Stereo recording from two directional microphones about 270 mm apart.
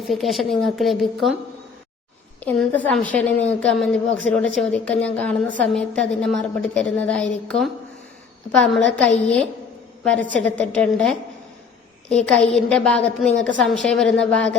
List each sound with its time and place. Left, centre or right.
0.1 s a woman's voice: centre
2.4 s a woman's voice: centre